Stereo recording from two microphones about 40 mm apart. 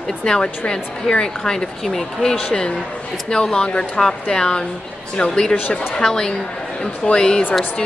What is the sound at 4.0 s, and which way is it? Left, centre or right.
A woman's voice, centre.